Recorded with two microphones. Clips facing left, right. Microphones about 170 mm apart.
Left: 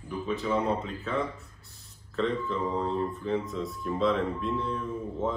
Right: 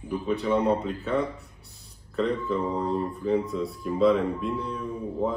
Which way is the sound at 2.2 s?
Centre (ahead or behind).